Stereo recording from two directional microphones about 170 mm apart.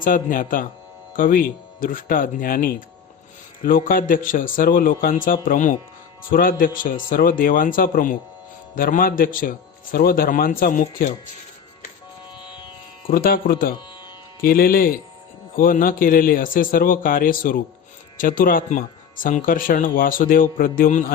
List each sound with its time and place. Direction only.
0.0 s speech: 55° left (ahead or behind)
13.1 s speech: 55° left (ahead or behind)